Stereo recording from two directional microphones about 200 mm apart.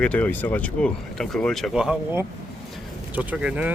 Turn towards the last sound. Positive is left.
turn(degrees=-5)  # may be behind; listen again after turning